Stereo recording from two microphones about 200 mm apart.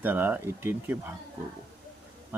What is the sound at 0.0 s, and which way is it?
Speech, 10° right (ahead or behind).